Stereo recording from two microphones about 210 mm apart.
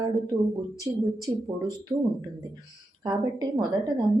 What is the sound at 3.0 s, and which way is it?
Speech, 20° right (ahead or behind).